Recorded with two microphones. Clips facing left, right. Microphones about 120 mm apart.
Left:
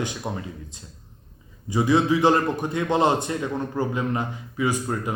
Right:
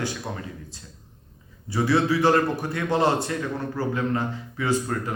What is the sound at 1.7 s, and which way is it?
A man's voice, 15° left (ahead or behind).